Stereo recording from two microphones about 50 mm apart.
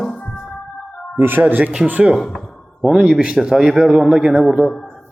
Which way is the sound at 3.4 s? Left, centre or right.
Centre.